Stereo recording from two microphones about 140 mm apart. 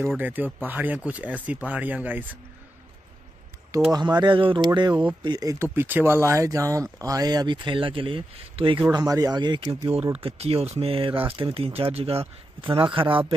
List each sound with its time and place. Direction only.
0.2 s speech: 10° right (ahead or behind)
3.9 s speech: 30° right (ahead or behind)
8.9 s speech: 25° right (ahead or behind)
10.2 s speech: 45° right (ahead or behind)